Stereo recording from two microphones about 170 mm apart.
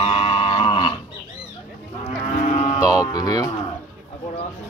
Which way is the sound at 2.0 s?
40° left (ahead or behind).